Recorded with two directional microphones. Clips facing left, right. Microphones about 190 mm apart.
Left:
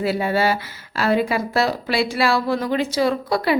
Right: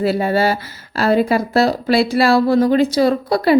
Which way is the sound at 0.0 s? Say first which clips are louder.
Right 4 dB; 40° right (ahead or behind).